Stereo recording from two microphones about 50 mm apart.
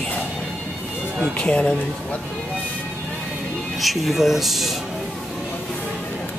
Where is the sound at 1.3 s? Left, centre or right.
Left.